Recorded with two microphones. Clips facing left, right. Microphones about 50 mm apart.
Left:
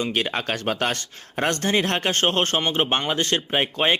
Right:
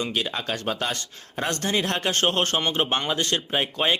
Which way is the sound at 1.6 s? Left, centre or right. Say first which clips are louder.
Left 1 dB; left.